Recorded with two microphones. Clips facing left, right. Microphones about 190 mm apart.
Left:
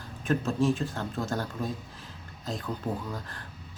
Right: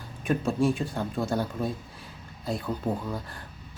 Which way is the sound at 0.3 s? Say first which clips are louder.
Right 1 dB; 15° right (ahead or behind).